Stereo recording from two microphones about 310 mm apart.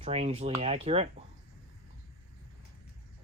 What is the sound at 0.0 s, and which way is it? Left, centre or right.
Speech, right.